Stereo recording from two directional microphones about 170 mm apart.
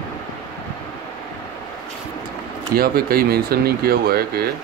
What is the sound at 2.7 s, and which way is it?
Speech, 60° right (ahead or behind).